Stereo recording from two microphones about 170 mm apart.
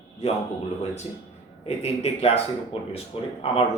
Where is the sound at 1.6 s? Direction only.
40° left (ahead or behind).